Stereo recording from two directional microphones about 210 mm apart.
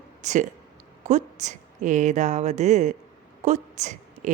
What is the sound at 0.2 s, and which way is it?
Speech, 35° right (ahead or behind).